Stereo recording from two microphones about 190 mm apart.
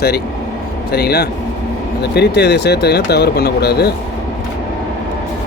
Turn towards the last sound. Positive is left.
turn(degrees=60)  # may be behind; listen again after turning